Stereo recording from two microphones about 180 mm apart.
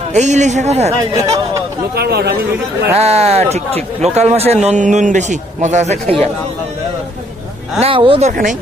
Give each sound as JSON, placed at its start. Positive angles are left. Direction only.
{"t": 0.1, "sound": "a man's voice", "side_deg": -40}
{"t": 2.0, "sound": "speech", "side_deg": -60}
{"t": 2.9, "sound": "a man's voice", "side_deg": -35}
{"t": 7.8, "sound": "a man's voice", "side_deg": -30}